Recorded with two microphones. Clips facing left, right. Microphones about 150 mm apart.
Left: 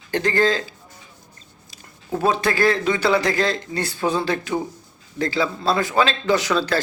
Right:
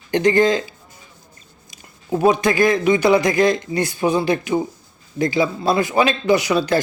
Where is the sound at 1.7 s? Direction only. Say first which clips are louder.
Right 4 dB; 15° right (ahead or behind).